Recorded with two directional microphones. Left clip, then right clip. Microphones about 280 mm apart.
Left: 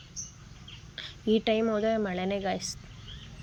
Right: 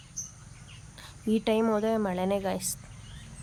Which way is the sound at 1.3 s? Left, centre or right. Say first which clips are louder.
Right 1 dB; centre.